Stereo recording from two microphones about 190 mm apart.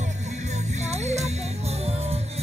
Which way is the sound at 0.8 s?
35° right (ahead or behind).